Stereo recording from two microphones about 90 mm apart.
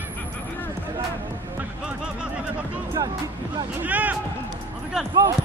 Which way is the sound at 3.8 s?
20° right (ahead or behind).